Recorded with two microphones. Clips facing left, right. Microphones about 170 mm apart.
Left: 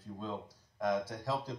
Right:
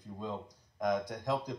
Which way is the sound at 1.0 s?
15° right (ahead or behind).